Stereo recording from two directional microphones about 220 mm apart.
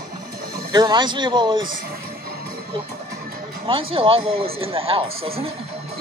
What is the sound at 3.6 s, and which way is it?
Speech, 25° right (ahead or behind).